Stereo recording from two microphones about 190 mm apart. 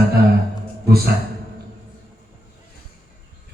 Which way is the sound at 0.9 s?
55° right (ahead or behind).